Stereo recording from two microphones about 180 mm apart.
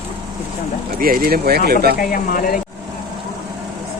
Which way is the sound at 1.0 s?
50° right (ahead or behind).